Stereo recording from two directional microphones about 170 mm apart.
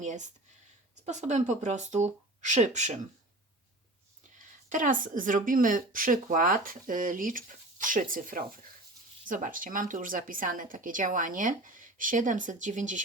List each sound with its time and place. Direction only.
0.0 s a woman's voice: 45° right (ahead or behind)
4.7 s a woman's voice: 50° right (ahead or behind)